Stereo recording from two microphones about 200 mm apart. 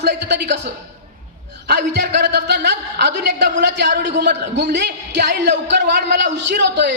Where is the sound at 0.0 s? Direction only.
55° right (ahead or behind).